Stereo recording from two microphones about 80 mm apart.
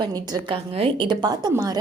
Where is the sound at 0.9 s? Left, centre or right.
Right.